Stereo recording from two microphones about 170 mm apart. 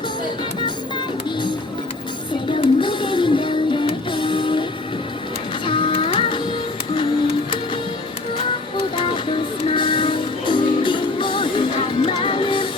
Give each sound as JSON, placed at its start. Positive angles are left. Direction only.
{"t": 2.5, "sound": "music", "side_deg": 30}
{"t": 5.6, "sound": "music", "side_deg": 30}
{"t": 9.6, "sound": "music", "side_deg": 30}